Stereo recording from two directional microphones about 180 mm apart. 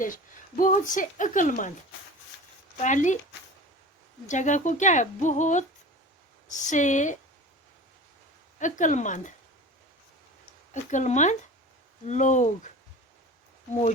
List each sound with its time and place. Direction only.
0.0 s a woman's voice: 50° left (ahead or behind)
2.8 s a woman's voice: 45° left (ahead or behind)
4.3 s a woman's voice: 45° left (ahead or behind)
8.5 s a woman's voice: 45° left (ahead or behind)
10.9 s a woman's voice: 40° left (ahead or behind)